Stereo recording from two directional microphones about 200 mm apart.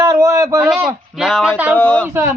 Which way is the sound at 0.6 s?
5° right (ahead or behind).